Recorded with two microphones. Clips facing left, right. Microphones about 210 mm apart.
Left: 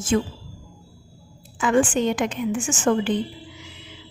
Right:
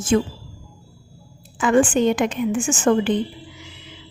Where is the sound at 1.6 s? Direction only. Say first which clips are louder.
Right 3 dB; 55° right (ahead or behind).